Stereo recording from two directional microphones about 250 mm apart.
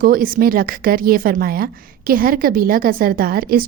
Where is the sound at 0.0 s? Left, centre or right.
Right.